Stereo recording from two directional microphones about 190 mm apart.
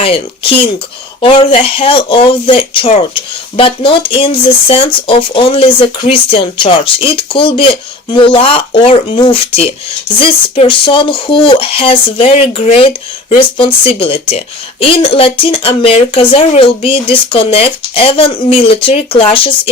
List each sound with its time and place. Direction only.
0.0 s speech: 30° left (ahead or behind)